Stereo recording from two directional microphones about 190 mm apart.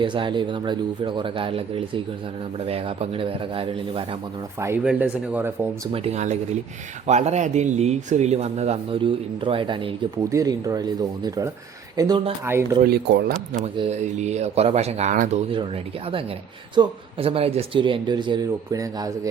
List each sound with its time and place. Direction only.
0.0 s speech: 25° right (ahead or behind)
4.6 s speech: 10° right (ahead or behind)
5.9 s speech: 35° right (ahead or behind)
12.8 s speech: 60° right (ahead or behind)
13.3 s speech: 40° right (ahead or behind); by 19.3 s 15° right (ahead or behind)